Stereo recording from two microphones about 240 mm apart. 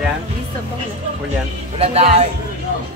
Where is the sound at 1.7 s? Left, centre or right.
Right.